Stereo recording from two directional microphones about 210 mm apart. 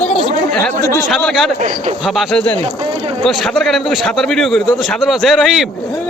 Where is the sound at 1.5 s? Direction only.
35° right (ahead or behind).